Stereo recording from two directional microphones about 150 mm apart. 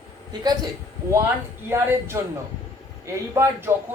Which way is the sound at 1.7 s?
15° right (ahead or behind).